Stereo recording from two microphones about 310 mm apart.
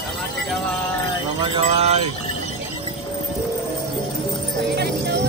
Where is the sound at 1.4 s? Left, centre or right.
Centre.